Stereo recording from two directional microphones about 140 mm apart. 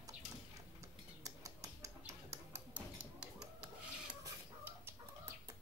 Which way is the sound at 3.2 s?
5° right (ahead or behind).